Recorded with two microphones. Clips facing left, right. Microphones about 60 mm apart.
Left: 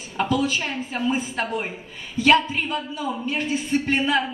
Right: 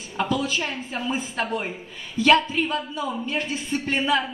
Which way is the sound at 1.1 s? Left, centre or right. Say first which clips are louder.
Right 2 dB; left.